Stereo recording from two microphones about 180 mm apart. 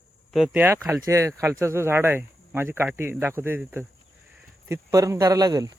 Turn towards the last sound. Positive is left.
turn(degrees=-20)  # may be behind; listen again after turning